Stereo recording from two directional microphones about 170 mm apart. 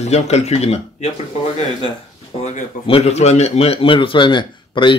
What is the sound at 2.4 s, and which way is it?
Speech, 40° left (ahead or behind).